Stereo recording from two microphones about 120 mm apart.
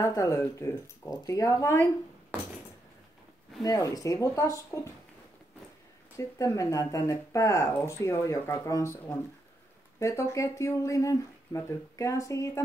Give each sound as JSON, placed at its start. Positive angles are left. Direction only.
{"t": 0.0, "sound": "speech", "side_deg": 30}
{"t": 3.6, "sound": "speech", "side_deg": 30}
{"t": 6.1, "sound": "speech", "side_deg": 25}